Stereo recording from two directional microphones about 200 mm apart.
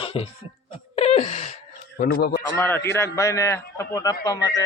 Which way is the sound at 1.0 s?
30° left (ahead or behind).